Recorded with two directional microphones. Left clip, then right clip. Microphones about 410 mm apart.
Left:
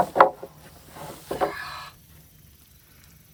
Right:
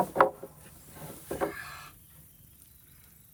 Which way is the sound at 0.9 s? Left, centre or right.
Centre.